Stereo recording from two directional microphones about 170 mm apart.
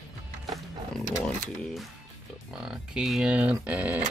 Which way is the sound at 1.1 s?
Centre (ahead or behind).